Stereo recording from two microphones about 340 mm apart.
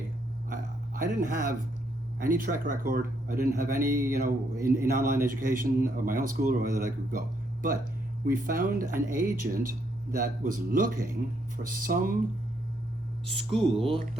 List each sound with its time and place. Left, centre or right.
0.5 s a sound: right
2.1 s a man's voice: right
13.5 s speech: centre